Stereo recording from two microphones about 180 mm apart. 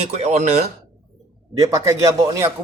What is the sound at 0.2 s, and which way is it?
Speech, 35° right (ahead or behind).